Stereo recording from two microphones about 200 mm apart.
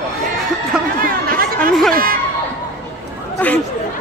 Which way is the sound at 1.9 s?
45° right (ahead or behind).